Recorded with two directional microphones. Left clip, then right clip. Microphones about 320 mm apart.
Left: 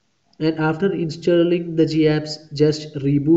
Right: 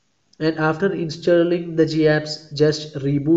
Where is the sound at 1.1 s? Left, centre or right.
Centre.